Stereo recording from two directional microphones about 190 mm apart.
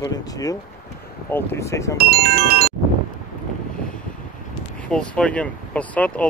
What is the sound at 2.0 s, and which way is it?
Speech, 55° right (ahead or behind).